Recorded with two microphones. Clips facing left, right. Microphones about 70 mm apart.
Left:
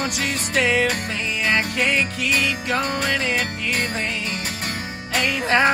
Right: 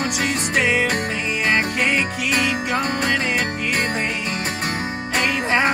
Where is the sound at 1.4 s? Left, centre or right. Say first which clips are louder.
Right 1 dB; right.